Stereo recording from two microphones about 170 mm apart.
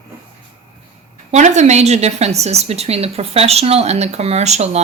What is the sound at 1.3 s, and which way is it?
A woman's voice, 45° right (ahead or behind).